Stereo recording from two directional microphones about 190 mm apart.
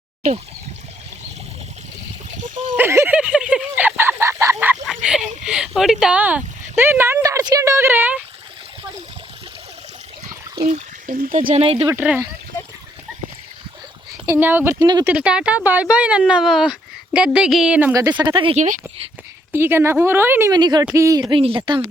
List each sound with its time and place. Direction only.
2.3 s a sound: 40° right (ahead or behind)
2.7 s a sound: 15° right (ahead or behind)
5.5 s speech: 5° right (ahead or behind)
10.7 s speech: 40° right (ahead or behind)
11.9 s speech: 10° right (ahead or behind)
14.3 s speech: 10° right (ahead or behind)
15.1 s speech: 5° right (ahead or behind)
18.2 s speech: 25° right (ahead or behind)
19.5 s speech: 10° right (ahead or behind)